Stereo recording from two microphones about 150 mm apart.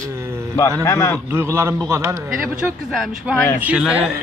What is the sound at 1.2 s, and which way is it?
Speech, 15° right (ahead or behind).